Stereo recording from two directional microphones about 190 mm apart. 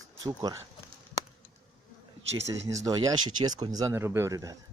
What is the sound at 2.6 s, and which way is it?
Speech, 15° right (ahead or behind).